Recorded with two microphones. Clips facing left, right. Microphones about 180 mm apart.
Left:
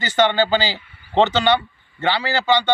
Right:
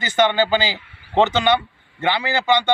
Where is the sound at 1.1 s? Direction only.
10° right (ahead or behind).